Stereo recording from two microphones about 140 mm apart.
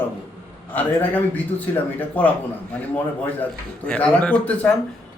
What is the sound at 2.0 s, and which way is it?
Speech, 10° left (ahead or behind).